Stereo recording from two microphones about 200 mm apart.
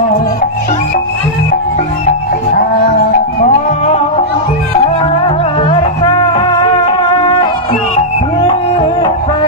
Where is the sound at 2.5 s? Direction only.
45° left (ahead or behind); by 7.5 s 25° left (ahead or behind).